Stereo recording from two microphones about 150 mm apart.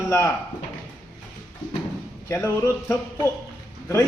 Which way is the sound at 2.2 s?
20° left (ahead or behind).